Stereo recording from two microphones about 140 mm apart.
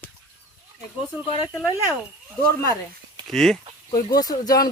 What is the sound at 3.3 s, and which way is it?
Speech, 5° left (ahead or behind).